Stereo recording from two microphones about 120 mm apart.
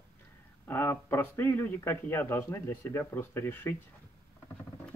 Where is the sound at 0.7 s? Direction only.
20° left (ahead or behind).